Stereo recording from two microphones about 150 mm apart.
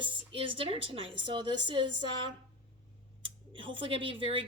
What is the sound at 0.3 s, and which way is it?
A woman's voice, 35° right (ahead or behind).